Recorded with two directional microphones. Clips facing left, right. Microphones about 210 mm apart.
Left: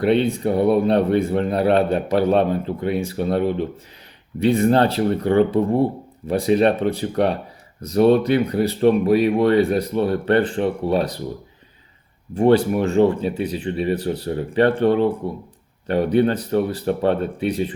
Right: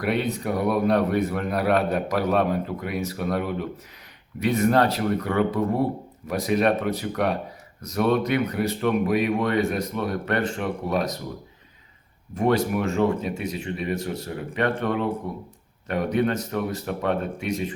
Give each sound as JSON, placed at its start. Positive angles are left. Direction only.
{"t": 0.0, "sound": "a man's voice", "side_deg": 30}
{"t": 12.3, "sound": "speech", "side_deg": 30}